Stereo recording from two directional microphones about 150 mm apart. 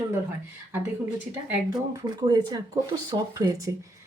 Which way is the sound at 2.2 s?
25° right (ahead or behind).